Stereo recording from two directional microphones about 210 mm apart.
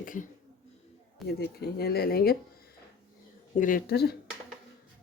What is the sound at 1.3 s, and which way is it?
Speech, 50° left (ahead or behind).